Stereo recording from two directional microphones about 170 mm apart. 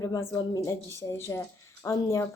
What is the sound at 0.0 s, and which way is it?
A woman's voice, 15° left (ahead or behind).